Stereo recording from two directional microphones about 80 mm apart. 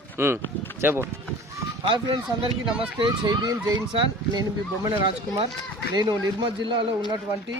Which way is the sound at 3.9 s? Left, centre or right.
Right.